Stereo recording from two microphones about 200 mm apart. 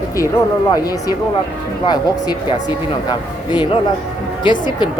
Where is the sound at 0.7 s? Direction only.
20° left (ahead or behind).